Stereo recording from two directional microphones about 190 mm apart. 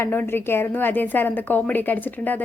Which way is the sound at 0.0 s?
10° left (ahead or behind).